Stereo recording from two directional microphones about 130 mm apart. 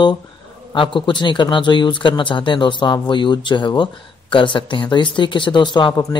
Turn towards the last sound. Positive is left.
turn(degrees=35)  # may be behind; listen again after turning